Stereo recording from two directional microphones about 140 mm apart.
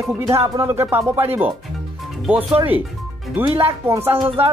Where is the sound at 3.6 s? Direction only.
15° right (ahead or behind).